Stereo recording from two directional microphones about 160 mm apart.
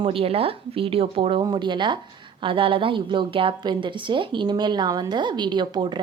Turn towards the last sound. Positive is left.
turn(degrees=-30)  # may be behind; listen again after turning